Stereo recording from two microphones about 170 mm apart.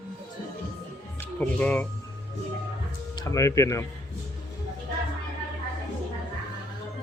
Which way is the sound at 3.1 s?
20° left (ahead or behind).